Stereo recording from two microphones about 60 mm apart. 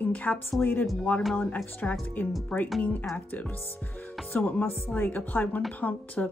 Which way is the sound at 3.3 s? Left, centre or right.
Left.